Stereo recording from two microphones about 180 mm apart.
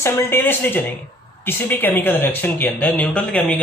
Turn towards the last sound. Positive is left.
turn(degrees=5)  # may be behind; listen again after turning